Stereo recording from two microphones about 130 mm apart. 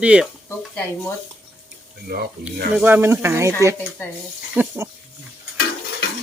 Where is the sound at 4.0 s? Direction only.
15° left (ahead or behind).